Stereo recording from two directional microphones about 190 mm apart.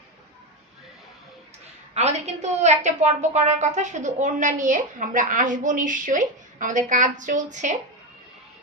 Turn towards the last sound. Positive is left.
turn(degrees=-40)  # may be behind; listen again after turning